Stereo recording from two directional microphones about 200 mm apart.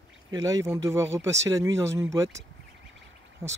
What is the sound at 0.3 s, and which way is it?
Speech, 15° right (ahead or behind).